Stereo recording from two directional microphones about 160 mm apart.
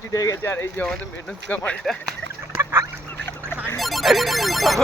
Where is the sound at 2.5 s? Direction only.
15° right (ahead or behind).